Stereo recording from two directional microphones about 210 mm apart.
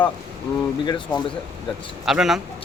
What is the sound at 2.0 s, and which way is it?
Speech, centre (ahead or behind).